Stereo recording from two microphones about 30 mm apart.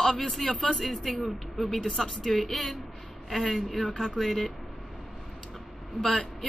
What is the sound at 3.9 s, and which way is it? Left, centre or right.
Speech, centre.